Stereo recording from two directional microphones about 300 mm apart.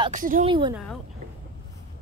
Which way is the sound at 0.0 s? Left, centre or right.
Right.